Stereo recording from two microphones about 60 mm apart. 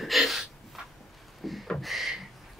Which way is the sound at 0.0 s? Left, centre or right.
Centre.